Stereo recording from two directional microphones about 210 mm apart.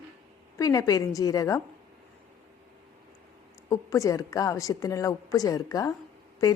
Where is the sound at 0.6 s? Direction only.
15° left (ahead or behind).